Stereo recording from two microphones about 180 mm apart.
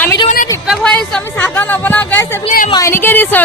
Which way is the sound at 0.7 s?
Centre (ahead or behind).